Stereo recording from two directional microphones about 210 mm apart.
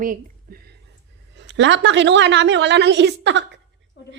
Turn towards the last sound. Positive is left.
turn(degrees=-55)  # may be behind; listen again after turning